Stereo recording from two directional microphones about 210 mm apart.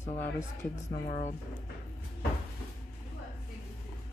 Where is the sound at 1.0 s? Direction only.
35° left (ahead or behind).